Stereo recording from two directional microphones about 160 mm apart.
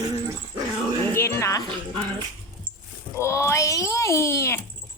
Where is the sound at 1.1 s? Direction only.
15° left (ahead or behind).